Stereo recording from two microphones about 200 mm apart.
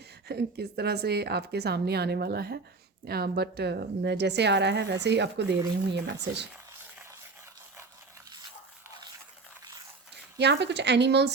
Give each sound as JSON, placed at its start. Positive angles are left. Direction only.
{"t": 0.3, "sound": "a woman's voice", "side_deg": -55}
{"t": 10.3, "sound": "a woman's voice", "side_deg": -55}